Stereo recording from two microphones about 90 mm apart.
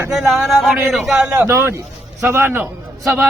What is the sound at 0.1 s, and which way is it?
Speech, centre (ahead or behind).